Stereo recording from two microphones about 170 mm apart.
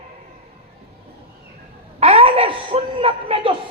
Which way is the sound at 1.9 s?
35° right (ahead or behind).